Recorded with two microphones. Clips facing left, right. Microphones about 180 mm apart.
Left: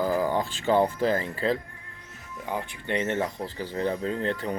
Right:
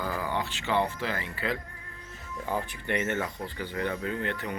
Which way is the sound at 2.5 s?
20° left (ahead or behind).